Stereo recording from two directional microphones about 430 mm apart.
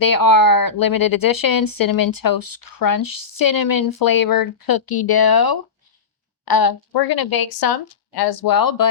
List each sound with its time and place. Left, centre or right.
0.0 s speech: left